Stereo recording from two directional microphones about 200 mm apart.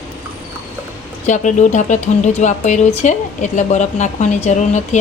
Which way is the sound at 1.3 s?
35° left (ahead or behind).